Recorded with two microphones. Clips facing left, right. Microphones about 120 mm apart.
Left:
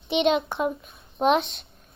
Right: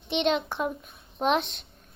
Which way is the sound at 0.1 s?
5° left (ahead or behind).